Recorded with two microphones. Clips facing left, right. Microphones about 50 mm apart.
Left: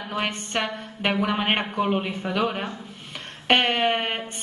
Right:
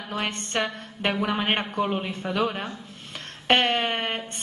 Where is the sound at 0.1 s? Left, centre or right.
Centre.